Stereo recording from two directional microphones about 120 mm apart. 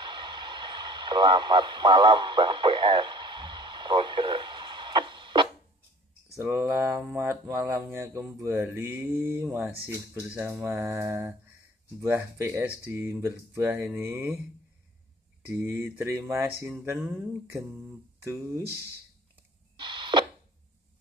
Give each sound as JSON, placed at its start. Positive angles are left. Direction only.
{"t": 0.0, "sound": "radio", "side_deg": -40}
{"t": 6.3, "sound": "speech", "side_deg": -25}
{"t": 15.4, "sound": "speech", "side_deg": -20}
{"t": 16.8, "sound": "a sound", "side_deg": -15}
{"t": 19.8, "sound": "radio", "side_deg": -40}